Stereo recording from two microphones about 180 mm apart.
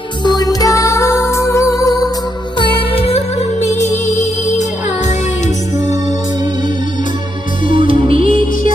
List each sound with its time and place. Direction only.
0.2 s music: 20° left (ahead or behind)
2.6 s music: 30° left (ahead or behind)
7.6 s music: 30° right (ahead or behind)
8.2 s music: 50° left (ahead or behind)